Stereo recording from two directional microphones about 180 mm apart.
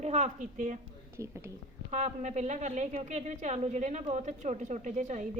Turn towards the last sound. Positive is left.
turn(degrees=-40)  # may be behind; listen again after turning